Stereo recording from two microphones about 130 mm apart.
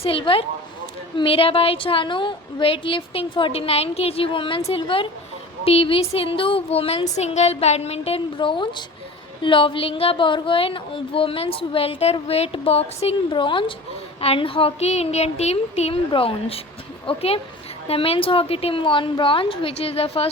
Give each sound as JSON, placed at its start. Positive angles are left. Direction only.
{"t": 0.0, "sound": "a woman's voice", "side_deg": 40}
{"t": 13.3, "sound": "a woman's voice", "side_deg": 40}